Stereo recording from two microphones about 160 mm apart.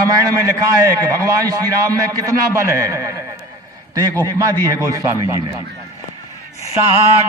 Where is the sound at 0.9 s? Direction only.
20° right (ahead or behind).